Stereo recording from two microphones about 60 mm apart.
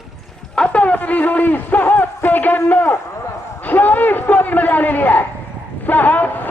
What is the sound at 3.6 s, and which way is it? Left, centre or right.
A man's voice, left.